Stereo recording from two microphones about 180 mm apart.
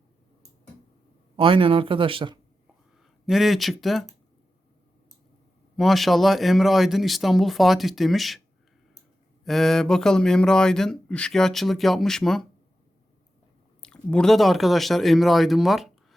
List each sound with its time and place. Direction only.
1.4 s speech: 30° right (ahead or behind)
3.2 s speech: centre (ahead or behind)
5.7 s speech: centre (ahead or behind)
9.4 s speech: centre (ahead or behind)
13.8 s speech: 5° left (ahead or behind)